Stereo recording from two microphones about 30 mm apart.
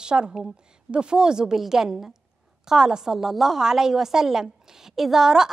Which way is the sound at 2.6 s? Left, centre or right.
Right.